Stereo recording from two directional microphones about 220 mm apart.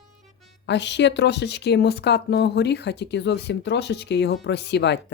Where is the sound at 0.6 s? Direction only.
50° left (ahead or behind).